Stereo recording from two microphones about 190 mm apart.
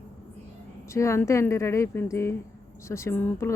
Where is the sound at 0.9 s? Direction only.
15° left (ahead or behind).